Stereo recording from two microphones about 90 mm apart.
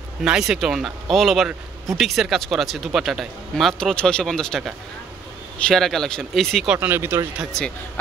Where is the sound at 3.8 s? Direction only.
10° left (ahead or behind).